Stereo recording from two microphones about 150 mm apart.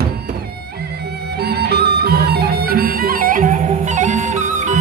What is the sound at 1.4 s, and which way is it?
Music, 90° right.